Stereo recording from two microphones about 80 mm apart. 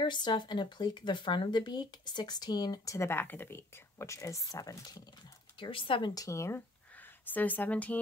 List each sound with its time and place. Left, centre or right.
0.0 s speech: left
3.1 s speech: left
5.6 s speech: left
6.1 s speech: left
7.0 s speech: left